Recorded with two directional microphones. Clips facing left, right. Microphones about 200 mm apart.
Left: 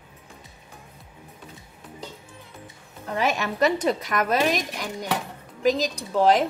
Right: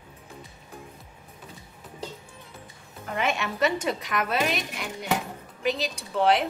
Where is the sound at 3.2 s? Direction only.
40° left (ahead or behind).